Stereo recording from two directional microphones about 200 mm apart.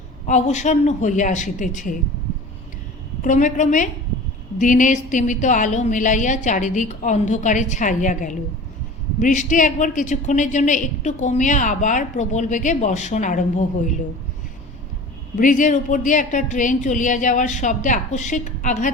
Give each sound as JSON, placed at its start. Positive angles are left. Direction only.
{"t": 0.3, "sound": "a woman's voice", "side_deg": 35}
{"t": 3.2, "sound": "a woman's voice", "side_deg": 40}
{"t": 15.4, "sound": "a woman's voice", "side_deg": 40}